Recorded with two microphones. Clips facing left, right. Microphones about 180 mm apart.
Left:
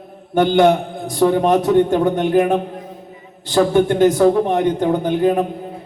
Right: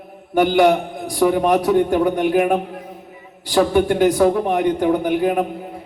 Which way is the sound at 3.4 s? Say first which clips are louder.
Left 1 dB; 25° left (ahead or behind).